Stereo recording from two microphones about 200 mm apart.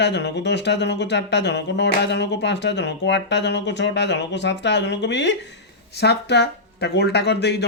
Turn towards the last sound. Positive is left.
turn(degrees=55)  # may be behind; listen again after turning